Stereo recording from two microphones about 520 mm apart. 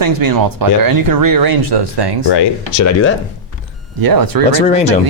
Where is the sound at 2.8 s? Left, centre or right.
Left.